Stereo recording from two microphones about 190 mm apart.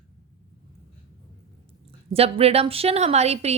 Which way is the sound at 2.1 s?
30° right (ahead or behind).